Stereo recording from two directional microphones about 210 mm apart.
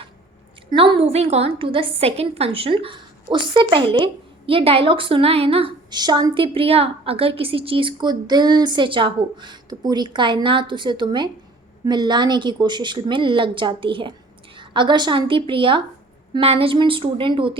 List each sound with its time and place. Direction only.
0.7 s a woman's voice: 25° right (ahead or behind)